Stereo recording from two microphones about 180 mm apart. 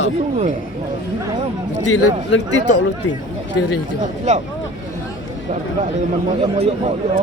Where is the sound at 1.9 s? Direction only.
90° left.